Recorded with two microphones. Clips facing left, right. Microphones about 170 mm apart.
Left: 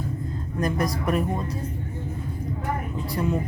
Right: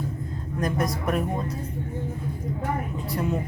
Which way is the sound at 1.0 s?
Centre (ahead or behind).